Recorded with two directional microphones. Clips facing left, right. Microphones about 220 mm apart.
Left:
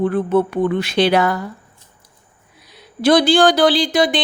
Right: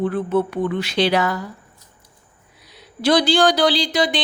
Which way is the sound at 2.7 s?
55° left (ahead or behind).